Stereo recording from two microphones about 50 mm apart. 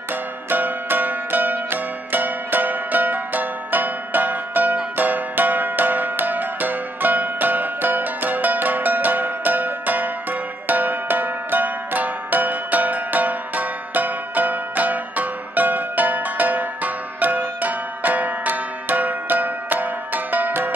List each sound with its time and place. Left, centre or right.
0.1 s music: right